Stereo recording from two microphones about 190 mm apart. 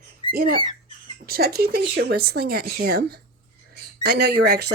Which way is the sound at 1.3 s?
55° right (ahead or behind).